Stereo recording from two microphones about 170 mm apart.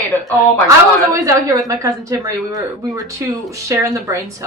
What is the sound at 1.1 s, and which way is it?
Speech, 20° right (ahead or behind).